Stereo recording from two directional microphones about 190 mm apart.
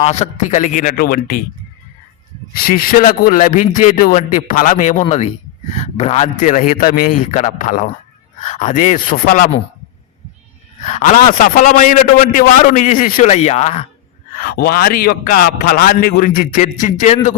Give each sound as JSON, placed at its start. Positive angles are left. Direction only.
{"t": 0.0, "sound": "a man's voice", "side_deg": 35}
{"t": 2.5, "sound": "a man's voice", "side_deg": 50}
{"t": 7.3, "sound": "a man's voice", "side_deg": 40}
{"t": 10.8, "sound": "a man's voice", "side_deg": 35}
{"t": 14.3, "sound": "a man's voice", "side_deg": 55}